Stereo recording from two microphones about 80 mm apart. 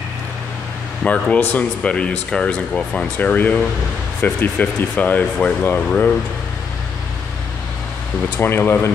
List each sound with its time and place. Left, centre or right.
1.0 s speech: centre
8.4 s speech: left